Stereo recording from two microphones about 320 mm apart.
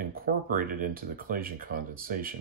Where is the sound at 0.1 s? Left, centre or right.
Right.